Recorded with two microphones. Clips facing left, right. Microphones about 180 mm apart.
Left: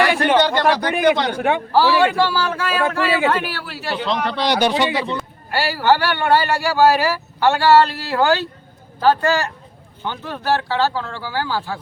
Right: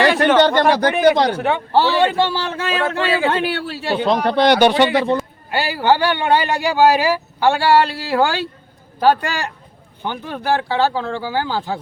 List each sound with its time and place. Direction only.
0.8 s speech: 40° right (ahead or behind)
1.4 s a man's voice: 10° left (ahead or behind)
1.7 s a man's voice: 25° right (ahead or behind)
4.0 s speech: 50° right (ahead or behind)
5.5 s speech: 15° right (ahead or behind)